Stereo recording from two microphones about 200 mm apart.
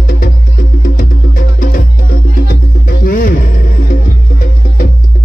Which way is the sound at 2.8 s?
45° left (ahead or behind).